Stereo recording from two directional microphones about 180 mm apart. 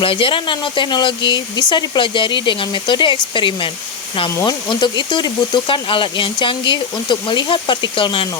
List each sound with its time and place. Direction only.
0.0 s speech: 30° left (ahead or behind)